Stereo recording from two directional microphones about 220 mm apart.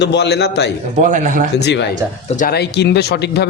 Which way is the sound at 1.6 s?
50° left (ahead or behind).